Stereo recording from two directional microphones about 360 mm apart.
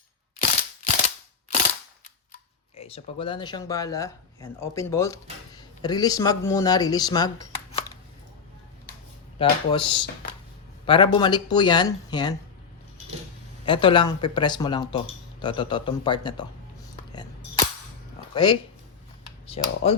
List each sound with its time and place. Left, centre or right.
2.7 s speech: centre
9.4 s speech: centre
13.7 s speech: centre
17.1 s a sound: centre
18.3 s speech: centre